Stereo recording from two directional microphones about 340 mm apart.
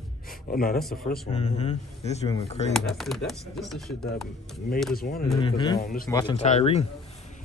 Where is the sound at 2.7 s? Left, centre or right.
Centre.